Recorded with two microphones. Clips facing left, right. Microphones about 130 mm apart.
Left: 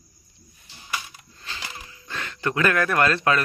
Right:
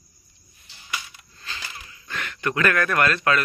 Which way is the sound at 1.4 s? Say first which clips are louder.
Left 1 dB; 20° left (ahead or behind).